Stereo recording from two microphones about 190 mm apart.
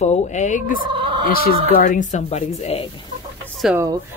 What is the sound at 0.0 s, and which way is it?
Speech, 35° left (ahead or behind).